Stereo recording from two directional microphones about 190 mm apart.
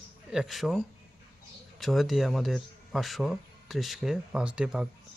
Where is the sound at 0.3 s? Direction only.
Centre (ahead or behind).